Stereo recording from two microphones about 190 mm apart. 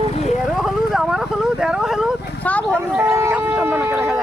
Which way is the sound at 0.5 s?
Centre (ahead or behind).